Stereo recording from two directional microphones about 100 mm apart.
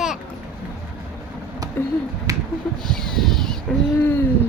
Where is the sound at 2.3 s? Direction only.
35° right (ahead or behind).